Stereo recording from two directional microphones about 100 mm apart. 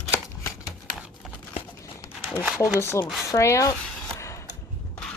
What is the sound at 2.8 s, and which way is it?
Speech, 30° left (ahead or behind).